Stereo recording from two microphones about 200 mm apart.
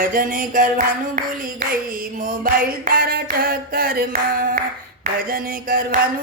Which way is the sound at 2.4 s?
50° right (ahead or behind).